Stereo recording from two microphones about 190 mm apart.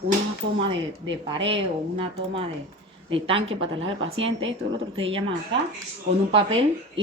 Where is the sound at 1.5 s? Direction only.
30° right (ahead or behind).